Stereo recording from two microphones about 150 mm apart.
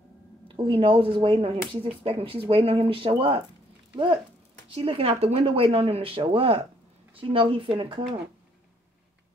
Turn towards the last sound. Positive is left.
turn(degrees=-35)  # may be behind; listen again after turning